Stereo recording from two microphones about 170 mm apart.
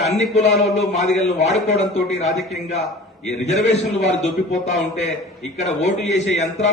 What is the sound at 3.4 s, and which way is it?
A man's voice, 40° left (ahead or behind).